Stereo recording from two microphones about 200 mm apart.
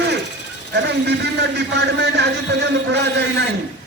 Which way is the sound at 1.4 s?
55° right (ahead or behind).